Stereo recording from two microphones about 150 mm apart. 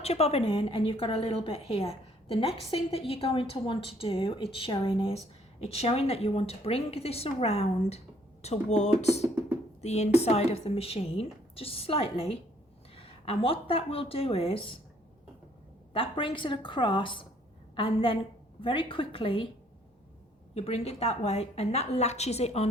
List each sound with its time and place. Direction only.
0.0 s a woman's voice: 45° left (ahead or behind)
15.9 s a woman's voice: 35° left (ahead or behind)
20.5 s a woman's voice: 45° left (ahead or behind)